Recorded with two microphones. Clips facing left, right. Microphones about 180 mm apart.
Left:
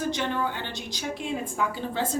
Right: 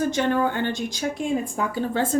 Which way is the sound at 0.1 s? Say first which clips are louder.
Right 6 dB; 50° right (ahead or behind).